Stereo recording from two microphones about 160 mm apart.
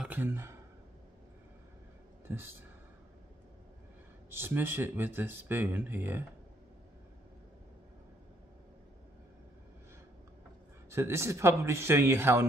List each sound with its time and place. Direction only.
0.0 s speech: 10° right (ahead or behind)
2.2 s speech: 15° right (ahead or behind)
4.3 s speech: 15° right (ahead or behind)
10.9 s speech: 15° right (ahead or behind)